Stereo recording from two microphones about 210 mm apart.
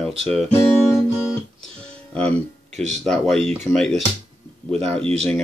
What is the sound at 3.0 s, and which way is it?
Speech, centre (ahead or behind).